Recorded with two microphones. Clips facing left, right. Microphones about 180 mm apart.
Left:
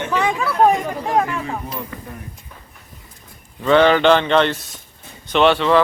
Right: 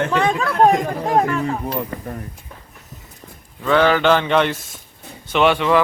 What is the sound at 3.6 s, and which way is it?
Speech, 5° right (ahead or behind).